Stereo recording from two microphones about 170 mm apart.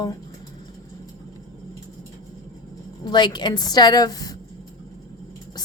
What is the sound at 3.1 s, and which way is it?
Speech, 25° left (ahead or behind).